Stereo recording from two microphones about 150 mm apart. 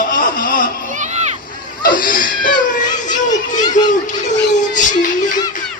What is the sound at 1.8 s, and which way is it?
Speech, 65° left (ahead or behind).